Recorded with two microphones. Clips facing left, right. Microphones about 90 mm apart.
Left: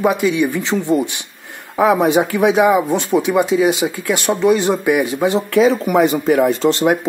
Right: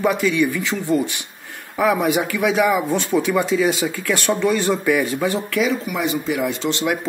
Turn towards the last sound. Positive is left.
turn(degrees=40)  # may be behind; listen again after turning